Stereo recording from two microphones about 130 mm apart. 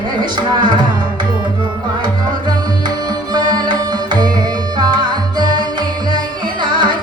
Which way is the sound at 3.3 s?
35° right (ahead or behind).